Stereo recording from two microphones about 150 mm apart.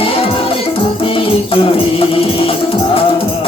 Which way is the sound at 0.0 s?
40° left (ahead or behind).